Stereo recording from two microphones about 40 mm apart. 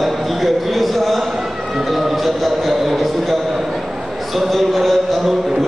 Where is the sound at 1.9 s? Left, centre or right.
Centre.